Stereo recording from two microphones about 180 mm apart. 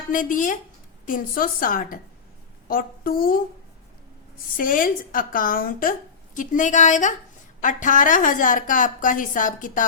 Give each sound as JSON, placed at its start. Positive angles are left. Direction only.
{"t": 0.1, "sound": "a woman's voice", "side_deg": 45}
{"t": 4.5, "sound": "a woman's voice", "side_deg": 50}